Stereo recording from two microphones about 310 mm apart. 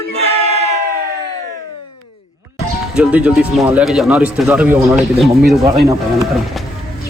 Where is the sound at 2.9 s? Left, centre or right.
Centre.